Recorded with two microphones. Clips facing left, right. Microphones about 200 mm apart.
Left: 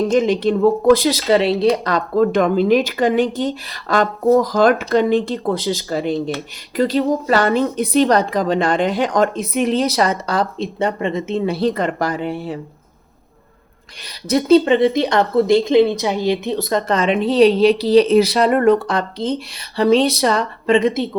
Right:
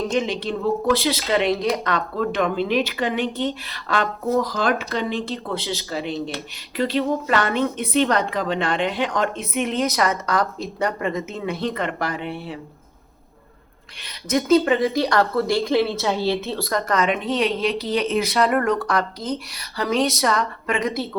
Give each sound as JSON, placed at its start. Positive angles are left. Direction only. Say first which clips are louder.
{"t": 0.1, "sound": "a woman's voice", "louder": "left 8 dB", "side_deg": 45}
{"t": 14.3, "sound": "speech", "louder": "left 5 dB", "side_deg": 30}